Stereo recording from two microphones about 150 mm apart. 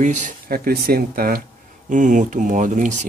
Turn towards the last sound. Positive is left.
turn(degrees=-55)  # may be behind; listen again after turning